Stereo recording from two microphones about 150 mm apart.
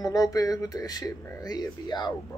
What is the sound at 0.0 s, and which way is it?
Speech, 25° left (ahead or behind).